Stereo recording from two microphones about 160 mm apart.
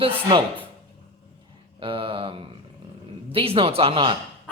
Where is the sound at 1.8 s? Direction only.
35° right (ahead or behind).